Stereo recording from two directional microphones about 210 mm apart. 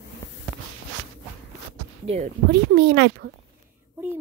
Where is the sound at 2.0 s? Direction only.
30° right (ahead or behind).